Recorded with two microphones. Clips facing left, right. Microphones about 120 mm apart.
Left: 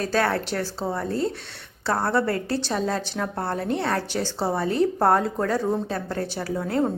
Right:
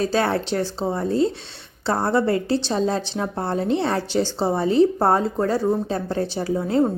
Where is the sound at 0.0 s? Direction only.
20° right (ahead or behind).